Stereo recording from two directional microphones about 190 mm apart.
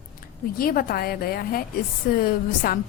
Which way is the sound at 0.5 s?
50° left (ahead or behind).